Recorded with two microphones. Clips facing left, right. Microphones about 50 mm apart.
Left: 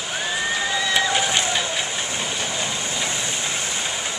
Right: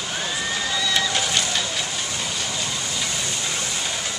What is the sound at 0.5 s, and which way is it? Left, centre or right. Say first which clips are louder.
Vehicle: left 2 dB; left.